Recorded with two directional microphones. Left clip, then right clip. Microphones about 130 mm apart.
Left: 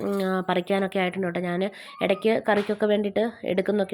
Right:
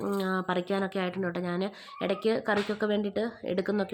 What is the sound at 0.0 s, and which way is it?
A woman's voice, 20° left (ahead or behind).